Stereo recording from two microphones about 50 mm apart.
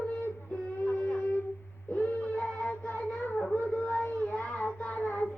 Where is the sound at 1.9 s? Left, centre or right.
Left.